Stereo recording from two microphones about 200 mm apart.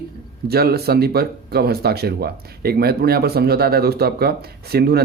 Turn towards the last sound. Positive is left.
turn(degrees=-50)  # may be behind; listen again after turning